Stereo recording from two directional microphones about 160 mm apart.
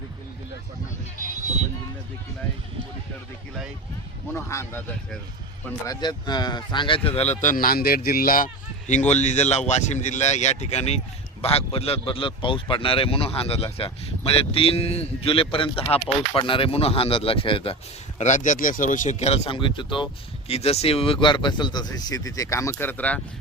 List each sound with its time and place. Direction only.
4.4 s speech: 15° left (ahead or behind)
5.9 s speech: 25° left (ahead or behind)
7.4 s speech: 65° left (ahead or behind)
8.9 s speech: 45° left (ahead or behind)
18.2 s speech: 50° left (ahead or behind); by 23.2 s 10° left (ahead or behind)